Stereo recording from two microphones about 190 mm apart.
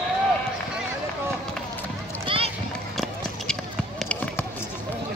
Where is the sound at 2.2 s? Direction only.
30° right (ahead or behind).